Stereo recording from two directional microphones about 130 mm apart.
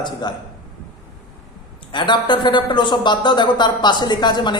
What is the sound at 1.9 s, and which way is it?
Speech, 35° left (ahead or behind).